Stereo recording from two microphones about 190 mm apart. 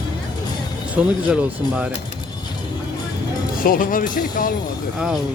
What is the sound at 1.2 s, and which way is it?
Speech, 5° right (ahead or behind).